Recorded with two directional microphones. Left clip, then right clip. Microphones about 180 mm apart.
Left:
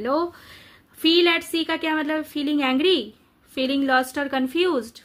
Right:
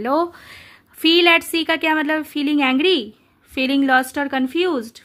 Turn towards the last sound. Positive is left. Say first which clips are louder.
# right 2 dB
turn(degrees=-30)  # may be behind; listen again after turning